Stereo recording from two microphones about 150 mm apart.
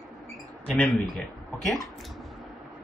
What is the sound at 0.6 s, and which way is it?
Speech, 5° left (ahead or behind).